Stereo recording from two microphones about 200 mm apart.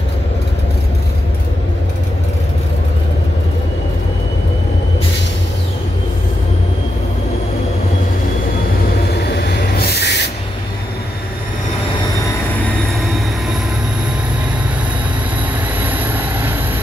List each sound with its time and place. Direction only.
9.8 s owl: 55° left (ahead or behind)
15.8 s vehicle: 10° right (ahead or behind)